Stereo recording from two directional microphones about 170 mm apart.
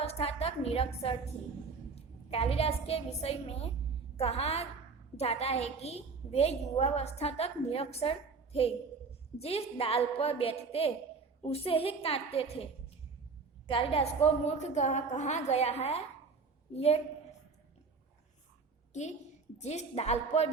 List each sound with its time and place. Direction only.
0.0 s a sound: 35° left (ahead or behind)
2.0 s a woman's voice: 35° left (ahead or behind)
9.4 s a woman's voice: 35° left (ahead or behind)
13.7 s a woman's voice: 35° left (ahead or behind)
19.5 s a woman's voice: 40° left (ahead or behind)